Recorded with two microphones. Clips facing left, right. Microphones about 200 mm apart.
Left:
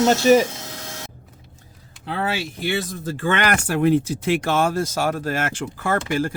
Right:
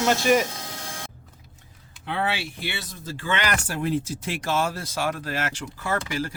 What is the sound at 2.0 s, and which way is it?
Speech, 40° left (ahead or behind).